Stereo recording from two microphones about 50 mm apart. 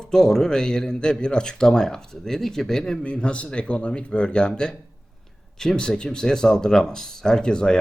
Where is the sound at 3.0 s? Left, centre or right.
Left.